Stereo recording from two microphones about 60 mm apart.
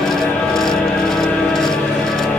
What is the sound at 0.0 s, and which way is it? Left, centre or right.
Music, centre.